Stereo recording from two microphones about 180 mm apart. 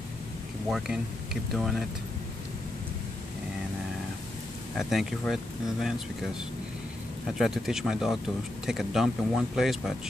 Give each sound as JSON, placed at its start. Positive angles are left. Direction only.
{"t": 0.7, "sound": "speech", "side_deg": 0}
{"t": 4.7, "sound": "speech", "side_deg": 0}
{"t": 7.3, "sound": "speech", "side_deg": 0}